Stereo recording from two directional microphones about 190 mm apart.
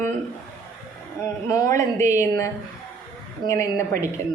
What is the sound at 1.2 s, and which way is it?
A man's voice, 15° left (ahead or behind).